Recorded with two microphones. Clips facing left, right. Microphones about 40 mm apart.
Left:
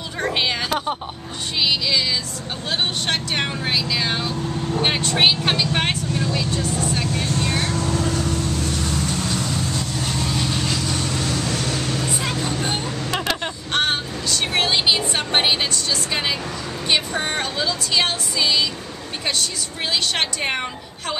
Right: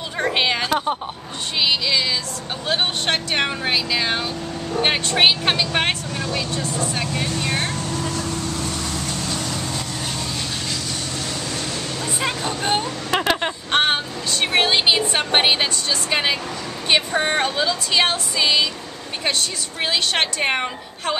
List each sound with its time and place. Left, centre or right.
0.2 s a sound: centre
1.6 s a woman's voice: centre
7.4 s vehicle: right
9.7 s vehicle: centre
11.3 s vehicle: centre
12.2 s vehicle: centre
16.9 s a woman's voice: centre